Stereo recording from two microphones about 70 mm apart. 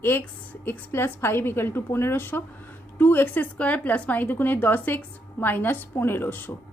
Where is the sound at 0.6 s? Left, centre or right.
Left.